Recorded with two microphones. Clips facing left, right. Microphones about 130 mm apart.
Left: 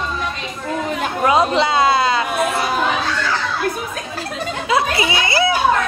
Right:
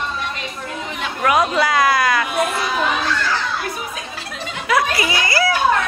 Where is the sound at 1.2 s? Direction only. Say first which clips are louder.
Left 1 dB; 25° left (ahead or behind).